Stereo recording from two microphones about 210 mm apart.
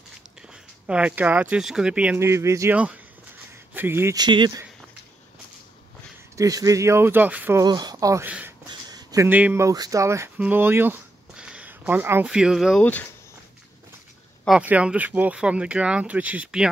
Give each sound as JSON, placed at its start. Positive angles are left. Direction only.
{"t": 0.4, "sound": "speech", "side_deg": -5}
{"t": 6.3, "sound": "speech", "side_deg": -15}
{"t": 8.6, "sound": "speech", "side_deg": -20}
{"t": 14.4, "sound": "speech", "side_deg": -5}